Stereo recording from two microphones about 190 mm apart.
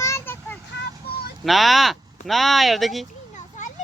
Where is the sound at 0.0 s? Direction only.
15° left (ahead or behind).